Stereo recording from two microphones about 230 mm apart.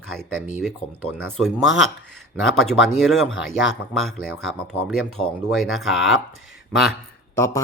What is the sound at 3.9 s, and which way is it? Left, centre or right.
Speech, centre.